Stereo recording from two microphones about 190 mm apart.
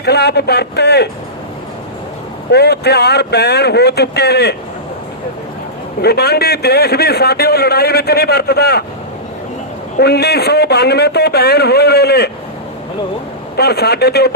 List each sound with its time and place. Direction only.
0.0 s a man's voice: 60° left (ahead or behind)
2.5 s a man's voice: 60° left (ahead or behind)
6.0 s a man's voice: 60° left (ahead or behind)
10.0 s a man's voice: 60° left (ahead or behind)
13.6 s a man's voice: 60° left (ahead or behind)